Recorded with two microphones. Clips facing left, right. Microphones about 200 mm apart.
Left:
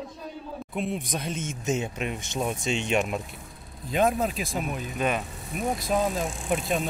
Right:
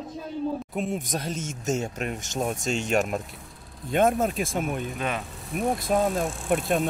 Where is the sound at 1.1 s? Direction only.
40° right (ahead or behind).